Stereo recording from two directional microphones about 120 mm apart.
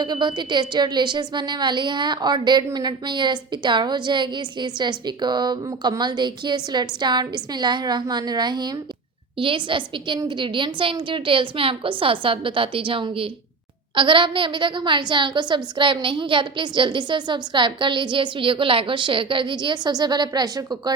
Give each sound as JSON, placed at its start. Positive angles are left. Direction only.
{"t": 0.0, "sound": "a woman's voice", "side_deg": -40}